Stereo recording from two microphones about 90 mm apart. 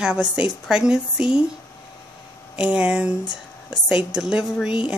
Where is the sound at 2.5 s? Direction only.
15° right (ahead or behind).